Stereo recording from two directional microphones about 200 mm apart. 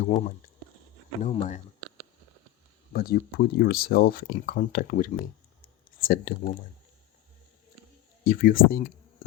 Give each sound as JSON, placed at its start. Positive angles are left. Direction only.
{"t": 1.2, "sound": "speech", "side_deg": 40}
{"t": 2.9, "sound": "speech", "side_deg": 50}
{"t": 5.6, "sound": "a sound", "side_deg": 45}
{"t": 8.2, "sound": "speech", "side_deg": 50}